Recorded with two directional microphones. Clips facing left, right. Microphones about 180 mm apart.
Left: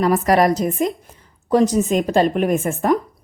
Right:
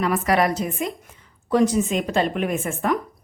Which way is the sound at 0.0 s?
40° left (ahead or behind).